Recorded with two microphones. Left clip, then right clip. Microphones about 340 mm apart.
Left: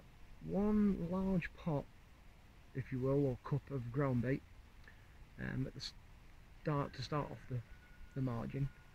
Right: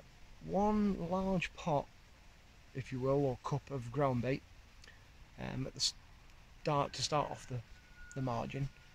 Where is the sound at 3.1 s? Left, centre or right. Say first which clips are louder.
Right 3 dB; centre.